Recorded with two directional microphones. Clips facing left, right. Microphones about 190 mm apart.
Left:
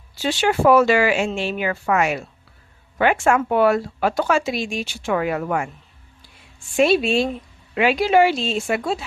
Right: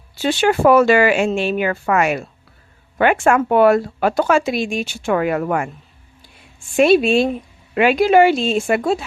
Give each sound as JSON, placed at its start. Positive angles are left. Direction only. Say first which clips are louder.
{"t": 0.2, "sound": "speech", "louder": "right 4 dB", "side_deg": -55}
{"t": 6.7, "sound": "speech", "louder": "right 4 dB", "side_deg": -55}